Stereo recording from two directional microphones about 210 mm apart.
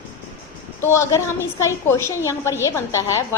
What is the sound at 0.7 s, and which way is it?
A woman's voice, 10° left (ahead or behind).